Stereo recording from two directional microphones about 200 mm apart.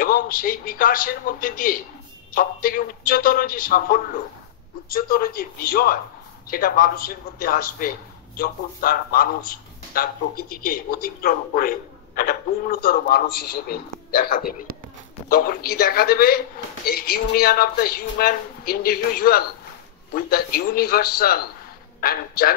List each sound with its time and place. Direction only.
0.0 s a man's voice: 45° left (ahead or behind)